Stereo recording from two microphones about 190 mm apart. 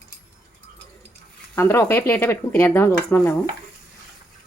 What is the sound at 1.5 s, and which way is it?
Speech, 15° left (ahead or behind).